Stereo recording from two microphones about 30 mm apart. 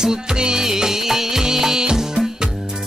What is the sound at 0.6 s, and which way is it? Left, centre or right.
Music of bollywood, centre.